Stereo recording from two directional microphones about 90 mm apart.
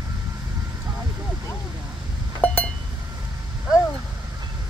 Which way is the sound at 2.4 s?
15° left (ahead or behind).